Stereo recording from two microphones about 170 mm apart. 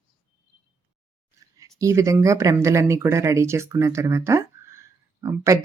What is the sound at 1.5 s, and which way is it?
Speech, 20° right (ahead or behind).